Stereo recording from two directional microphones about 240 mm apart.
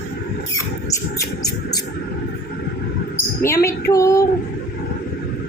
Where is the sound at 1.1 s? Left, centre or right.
Centre.